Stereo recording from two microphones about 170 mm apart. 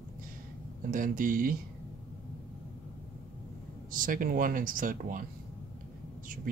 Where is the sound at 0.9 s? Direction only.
50° right (ahead or behind).